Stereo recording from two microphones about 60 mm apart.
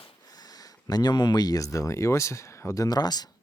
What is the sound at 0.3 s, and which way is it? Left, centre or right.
Speech, left.